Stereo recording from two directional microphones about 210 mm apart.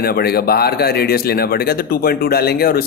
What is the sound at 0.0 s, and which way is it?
A man's voice, 45° left (ahead or behind).